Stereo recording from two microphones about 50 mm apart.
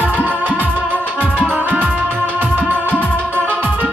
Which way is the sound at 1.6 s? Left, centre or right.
Right.